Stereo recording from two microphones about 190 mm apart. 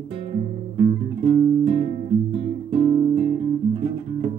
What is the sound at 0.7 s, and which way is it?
Guitar, 25° right (ahead or behind).